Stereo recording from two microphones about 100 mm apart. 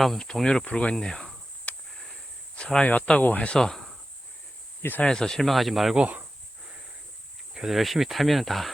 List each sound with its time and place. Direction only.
0.0 s speech: 5° left (ahead or behind)
4.8 s speech: 20° left (ahead or behind)
5.0 s speech: 5° left (ahead or behind); by 6.2 s 10° right (ahead or behind)
7.5 s speech: 5° right (ahead or behind)